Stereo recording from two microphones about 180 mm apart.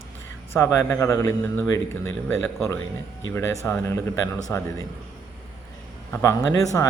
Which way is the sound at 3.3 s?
15° left (ahead or behind).